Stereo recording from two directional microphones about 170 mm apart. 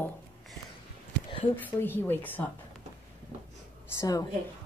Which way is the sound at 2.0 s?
10° left (ahead or behind).